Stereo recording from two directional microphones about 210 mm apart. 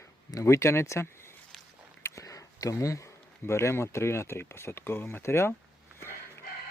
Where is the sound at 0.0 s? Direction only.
15° left (ahead or behind).